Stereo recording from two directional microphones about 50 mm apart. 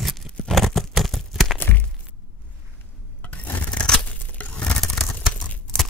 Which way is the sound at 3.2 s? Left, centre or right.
Left.